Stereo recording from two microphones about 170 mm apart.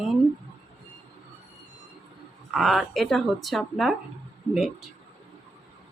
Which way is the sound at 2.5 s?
Centre (ahead or behind).